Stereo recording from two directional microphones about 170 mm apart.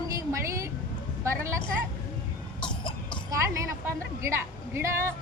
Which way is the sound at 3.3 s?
20° right (ahead or behind).